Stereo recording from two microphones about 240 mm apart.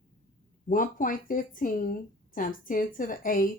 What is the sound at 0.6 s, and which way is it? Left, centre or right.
Speech, left.